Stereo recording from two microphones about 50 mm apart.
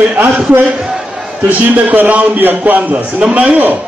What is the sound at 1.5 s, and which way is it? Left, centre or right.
A man's voice, right.